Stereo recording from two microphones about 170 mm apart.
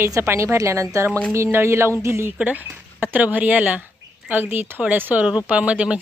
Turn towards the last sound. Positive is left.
turn(degrees=-5)  # may be behind; listen again after turning